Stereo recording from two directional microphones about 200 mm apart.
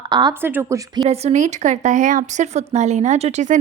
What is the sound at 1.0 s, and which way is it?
Speech, 35° right (ahead or behind).